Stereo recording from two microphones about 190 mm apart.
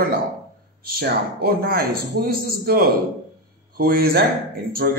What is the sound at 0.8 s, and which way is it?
A man's voice, 55° right (ahead or behind).